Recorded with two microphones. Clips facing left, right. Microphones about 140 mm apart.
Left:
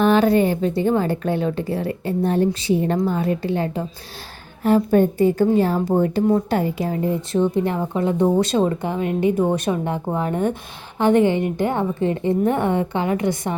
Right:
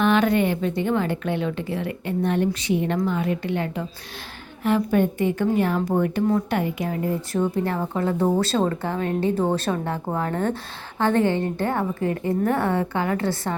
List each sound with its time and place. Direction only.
0.0 s a woman's voice: 35° left (ahead or behind); by 13.6 s 20° left (ahead or behind)